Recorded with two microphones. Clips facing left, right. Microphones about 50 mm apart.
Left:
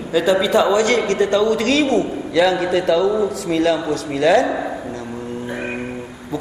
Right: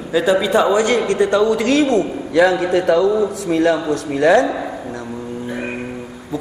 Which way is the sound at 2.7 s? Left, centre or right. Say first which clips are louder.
Right 2 dB; right.